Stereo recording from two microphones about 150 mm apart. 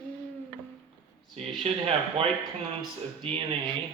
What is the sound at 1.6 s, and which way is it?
Speech, 40° right (ahead or behind).